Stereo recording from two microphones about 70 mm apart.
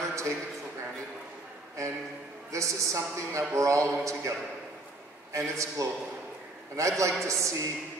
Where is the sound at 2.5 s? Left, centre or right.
Right.